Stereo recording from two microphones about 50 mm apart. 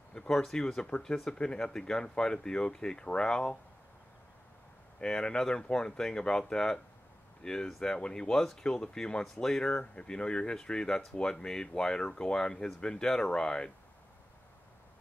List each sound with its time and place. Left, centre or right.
0.1 s speech: centre
5.0 s speech: centre
9.6 s speech: centre